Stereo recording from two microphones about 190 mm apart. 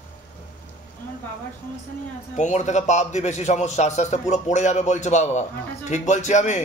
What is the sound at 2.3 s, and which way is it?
A man's voice, 40° left (ahead or behind).